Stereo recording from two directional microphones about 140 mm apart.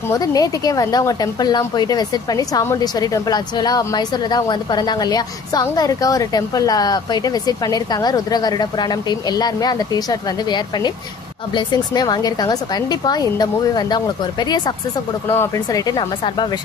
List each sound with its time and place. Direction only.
0.1 s speech: 25° left (ahead or behind)
15.3 s speech: 20° left (ahead or behind)